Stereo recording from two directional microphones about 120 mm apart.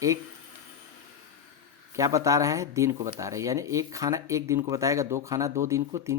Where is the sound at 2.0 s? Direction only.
25° right (ahead or behind).